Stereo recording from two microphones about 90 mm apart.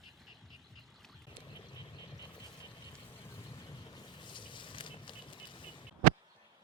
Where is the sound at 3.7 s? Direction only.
50° left (ahead or behind); by 5.9 s 70° left (ahead or behind).